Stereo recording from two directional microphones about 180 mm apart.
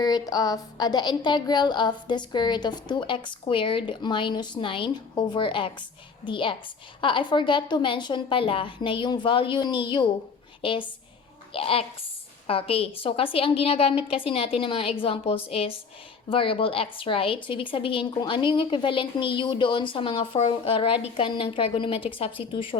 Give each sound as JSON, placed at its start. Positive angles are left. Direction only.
{"t": 0.0, "sound": "a woman's voice", "side_deg": 20}